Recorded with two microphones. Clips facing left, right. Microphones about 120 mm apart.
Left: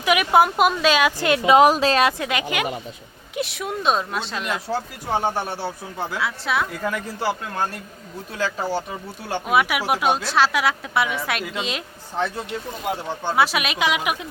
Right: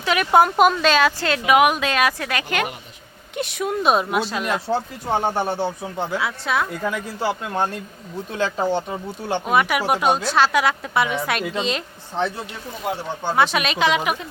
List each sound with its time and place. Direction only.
0.0 s a sound: 10° left (ahead or behind)
0.3 s a woman's voice: 5° left (ahead or behind)
1.5 s a woman's voice: 30° left (ahead or behind); by 2.6 s 15° left (ahead or behind)
3.3 s a woman's voice: centre (ahead or behind)
5.5 s a man's voice: 20° right (ahead or behind)
6.1 s a woman's voice: centre (ahead or behind)
6.9 s a man's voice: 20° right (ahead or behind)
9.5 s a woman's voice: 5° left (ahead or behind)
13.3 s speech: 5° left (ahead or behind)